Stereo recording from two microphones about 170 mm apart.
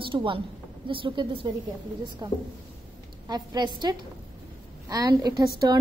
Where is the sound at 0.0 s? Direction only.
30° right (ahead or behind).